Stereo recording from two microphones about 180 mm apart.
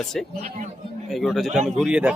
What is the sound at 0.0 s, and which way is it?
A man's voice, centre (ahead or behind).